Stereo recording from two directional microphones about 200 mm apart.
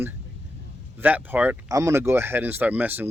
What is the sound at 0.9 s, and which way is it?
Speech, 10° right (ahead or behind).